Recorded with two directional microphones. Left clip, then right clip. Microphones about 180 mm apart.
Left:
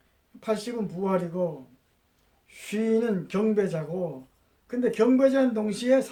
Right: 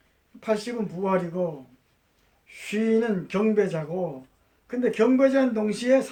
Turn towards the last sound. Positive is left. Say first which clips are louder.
# right 1 dB
turn(degrees=20)  # may be behind; listen again after turning